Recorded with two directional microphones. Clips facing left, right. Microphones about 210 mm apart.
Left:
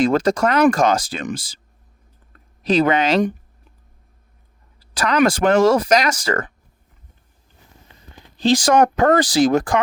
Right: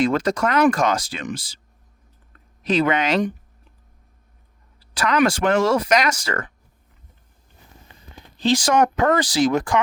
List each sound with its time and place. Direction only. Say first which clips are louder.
0.0 s speech: left 3 dB; 40° left (ahead or behind)
2.6 s speech: left 3 dB; 35° left (ahead or behind)
4.9 s speech: left 2 dB; 40° left (ahead or behind)
8.4 s speech: left 3 dB; 35° left (ahead or behind)